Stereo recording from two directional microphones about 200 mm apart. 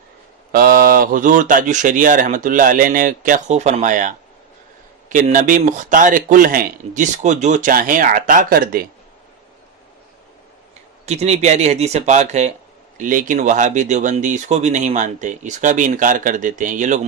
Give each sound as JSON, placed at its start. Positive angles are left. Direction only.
{"t": 0.5, "sound": "speech", "side_deg": -45}
{"t": 11.0, "sound": "speech", "side_deg": -35}